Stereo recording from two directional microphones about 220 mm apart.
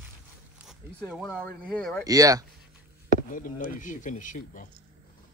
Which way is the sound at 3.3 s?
40° left (ahead or behind).